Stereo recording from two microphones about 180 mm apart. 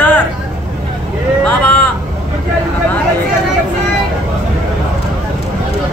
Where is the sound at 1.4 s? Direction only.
10° left (ahead or behind).